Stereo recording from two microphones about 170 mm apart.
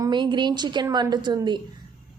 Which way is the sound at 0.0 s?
25° right (ahead or behind).